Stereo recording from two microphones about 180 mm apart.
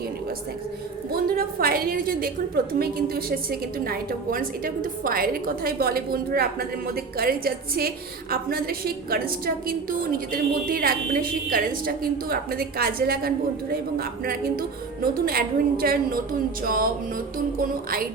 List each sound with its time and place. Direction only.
1.4 s a woman's voice: 55° right (ahead or behind)
16.6 s music: 50° right (ahead or behind)